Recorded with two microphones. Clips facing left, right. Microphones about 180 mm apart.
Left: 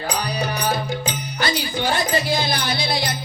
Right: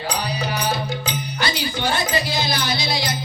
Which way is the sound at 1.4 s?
50° left (ahead or behind).